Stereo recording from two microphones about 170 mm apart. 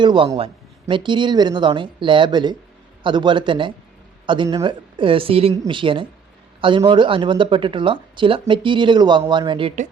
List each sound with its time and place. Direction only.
0.0 s speech: 25° right (ahead or behind)